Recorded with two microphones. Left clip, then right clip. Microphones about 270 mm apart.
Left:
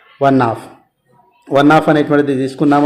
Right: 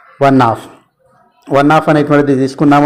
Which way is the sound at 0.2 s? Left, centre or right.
Right.